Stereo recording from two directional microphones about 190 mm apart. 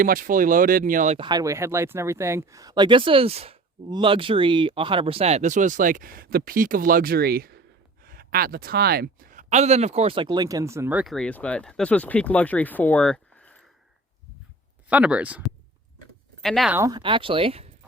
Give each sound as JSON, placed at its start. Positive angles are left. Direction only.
{"t": 0.0, "sound": "speech", "side_deg": -45}
{"t": 1.2, "sound": "speech", "side_deg": -20}
{"t": 14.8, "sound": "speech", "side_deg": -5}
{"t": 16.7, "sound": "speech", "side_deg": -15}
{"t": 17.0, "sound": "speech", "side_deg": -25}